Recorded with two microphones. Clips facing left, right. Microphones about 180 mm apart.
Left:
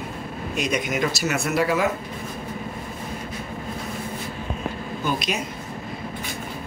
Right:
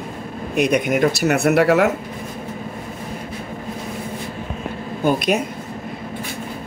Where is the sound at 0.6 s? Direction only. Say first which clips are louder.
Right 8 dB; 60° right (ahead or behind).